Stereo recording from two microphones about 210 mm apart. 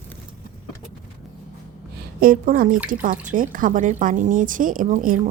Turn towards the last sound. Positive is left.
turn(degrees=-40)  # may be behind; listen again after turning